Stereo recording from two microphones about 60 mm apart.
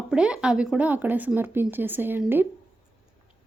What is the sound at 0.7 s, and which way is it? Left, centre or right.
Speech, right.